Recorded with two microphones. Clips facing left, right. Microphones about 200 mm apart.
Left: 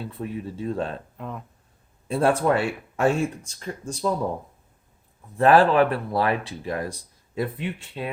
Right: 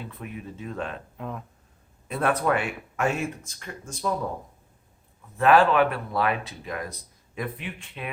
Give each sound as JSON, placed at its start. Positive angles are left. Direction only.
{"t": 0.0, "sound": "speech", "side_deg": 35}
{"t": 1.1, "sound": "speech", "side_deg": 0}
{"t": 2.0, "sound": "speech", "side_deg": 30}
{"t": 5.4, "sound": "speech", "side_deg": 35}